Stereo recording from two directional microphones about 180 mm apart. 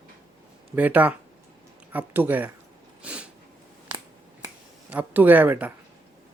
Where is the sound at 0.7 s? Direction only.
10° right (ahead or behind).